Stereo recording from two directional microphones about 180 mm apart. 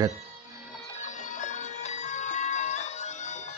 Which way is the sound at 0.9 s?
45° left (ahead or behind).